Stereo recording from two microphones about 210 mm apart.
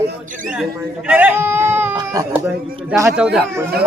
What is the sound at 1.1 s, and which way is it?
A man's voice, 10° right (ahead or behind).